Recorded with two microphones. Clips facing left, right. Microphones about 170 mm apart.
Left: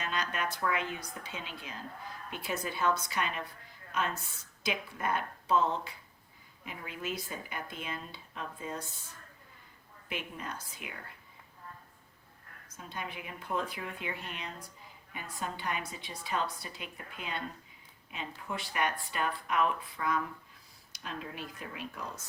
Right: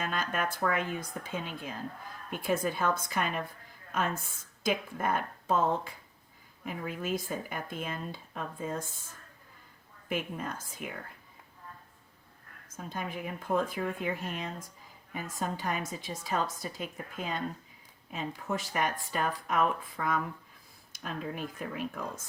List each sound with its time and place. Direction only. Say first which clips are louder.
0.0 s a woman's voice: right 3 dB; 50° right (ahead or behind)
12.6 s speech: right 4 dB; 45° right (ahead or behind)